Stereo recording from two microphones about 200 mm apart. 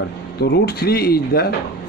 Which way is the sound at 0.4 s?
55° left (ahead or behind).